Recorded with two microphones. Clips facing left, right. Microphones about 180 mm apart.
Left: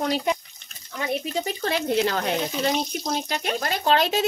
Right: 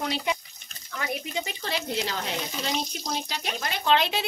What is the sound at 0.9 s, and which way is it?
Speech, 25° left (ahead or behind).